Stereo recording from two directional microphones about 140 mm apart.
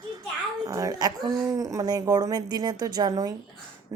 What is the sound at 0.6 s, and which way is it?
A woman's voice, 25° right (ahead or behind).